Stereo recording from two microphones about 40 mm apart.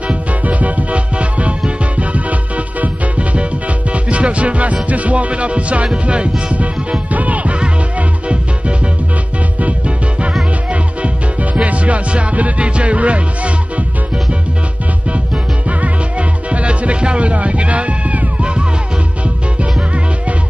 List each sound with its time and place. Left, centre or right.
0.1 s music: right
9.6 s music: right
11.5 s music: right
15.8 s music: right